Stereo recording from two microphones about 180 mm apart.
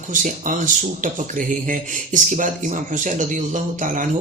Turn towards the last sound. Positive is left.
turn(degrees=-45)  # may be behind; listen again after turning